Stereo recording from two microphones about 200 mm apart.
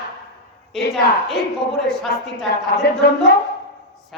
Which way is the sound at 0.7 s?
Centre (ahead or behind).